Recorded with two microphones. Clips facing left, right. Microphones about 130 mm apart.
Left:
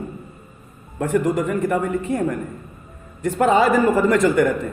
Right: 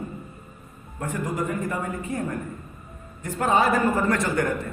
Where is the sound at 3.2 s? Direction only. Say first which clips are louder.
Left 6 dB; 90° left.